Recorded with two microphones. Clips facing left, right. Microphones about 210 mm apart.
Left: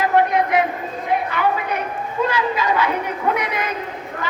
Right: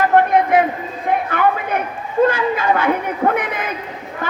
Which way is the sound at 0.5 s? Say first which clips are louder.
Right 3 dB; 50° right (ahead or behind).